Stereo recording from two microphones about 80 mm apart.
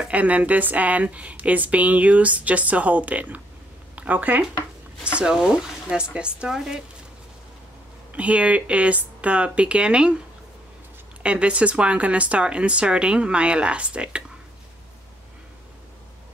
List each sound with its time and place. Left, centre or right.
0.0 s a woman's voice: centre
8.1 s speech: centre
11.2 s speech: centre